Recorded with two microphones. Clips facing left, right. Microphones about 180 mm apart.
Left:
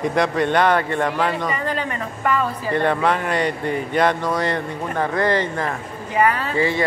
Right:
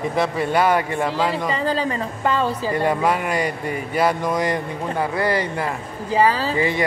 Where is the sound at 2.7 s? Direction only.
10° right (ahead or behind).